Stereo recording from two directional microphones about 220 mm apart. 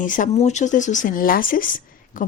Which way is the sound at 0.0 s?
35° left (ahead or behind).